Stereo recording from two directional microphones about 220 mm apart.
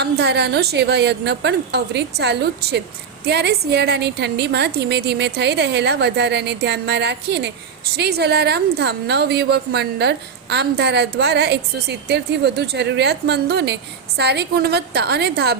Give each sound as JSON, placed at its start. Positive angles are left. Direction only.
{"t": 0.0, "sound": "a woman's voice", "side_deg": -50}